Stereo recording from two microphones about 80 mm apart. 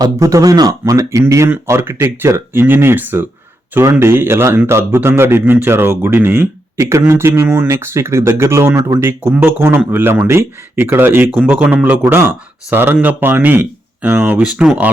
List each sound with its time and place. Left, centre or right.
0.0 s speech: right
1.6 s speech: right; by 14.8 s centre